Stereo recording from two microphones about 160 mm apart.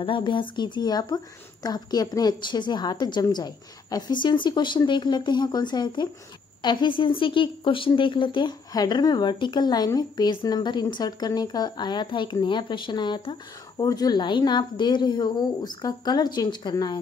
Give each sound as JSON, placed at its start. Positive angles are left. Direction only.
{"t": 0.0, "sound": "a woman's voice", "side_deg": 30}